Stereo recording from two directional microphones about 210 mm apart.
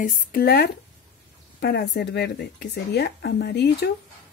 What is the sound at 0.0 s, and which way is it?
Speech, 45° left (ahead or behind).